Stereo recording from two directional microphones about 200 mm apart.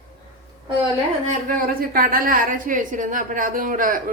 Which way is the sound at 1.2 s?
45° right (ahead or behind).